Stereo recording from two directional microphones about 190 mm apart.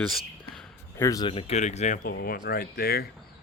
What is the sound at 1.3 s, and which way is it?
Speech, 30° left (ahead or behind).